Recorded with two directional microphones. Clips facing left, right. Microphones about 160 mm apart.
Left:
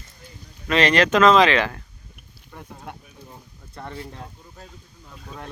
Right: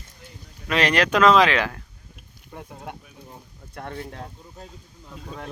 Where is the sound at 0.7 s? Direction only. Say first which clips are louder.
Left 3 dB; 10° right (ahead or behind).